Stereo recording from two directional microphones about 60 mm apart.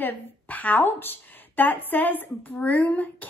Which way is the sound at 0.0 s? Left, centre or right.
Left.